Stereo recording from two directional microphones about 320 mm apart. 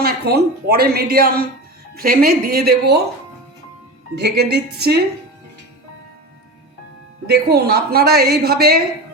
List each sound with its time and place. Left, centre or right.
0.0 s a woman's voice: right
4.1 s a woman's voice: right
7.5 s a woman's voice: right